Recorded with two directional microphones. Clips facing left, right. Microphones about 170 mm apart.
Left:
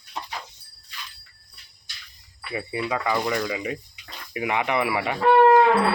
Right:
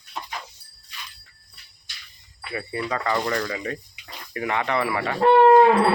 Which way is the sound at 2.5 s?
10° left (ahead or behind).